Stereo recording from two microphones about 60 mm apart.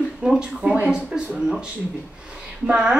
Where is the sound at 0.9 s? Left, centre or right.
Centre.